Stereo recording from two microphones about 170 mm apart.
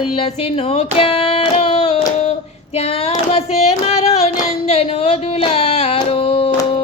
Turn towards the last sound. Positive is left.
turn(degrees=35)  # may be behind; listen again after turning